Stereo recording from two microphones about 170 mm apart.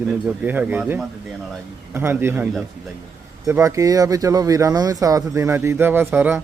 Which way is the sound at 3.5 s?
15° right (ahead or behind).